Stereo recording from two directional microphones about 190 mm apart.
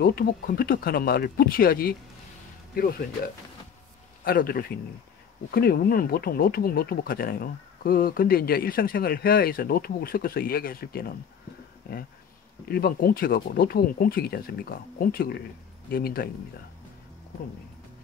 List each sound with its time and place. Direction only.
0.0 s speech: 50° left (ahead or behind)
4.2 s speech: 50° left (ahead or behind)